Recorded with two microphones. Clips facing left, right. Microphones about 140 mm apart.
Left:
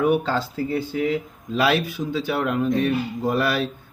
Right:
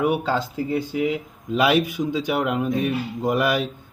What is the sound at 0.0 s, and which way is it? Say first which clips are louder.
Speech: left 1 dB; 10° right (ahead or behind).